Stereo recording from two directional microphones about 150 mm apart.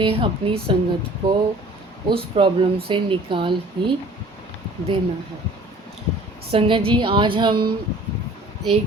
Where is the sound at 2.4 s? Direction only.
35° right (ahead or behind).